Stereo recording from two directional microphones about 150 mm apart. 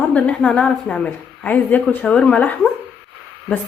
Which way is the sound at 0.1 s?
10° left (ahead or behind).